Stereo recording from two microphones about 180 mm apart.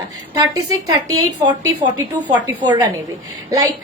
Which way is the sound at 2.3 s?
10° right (ahead or behind).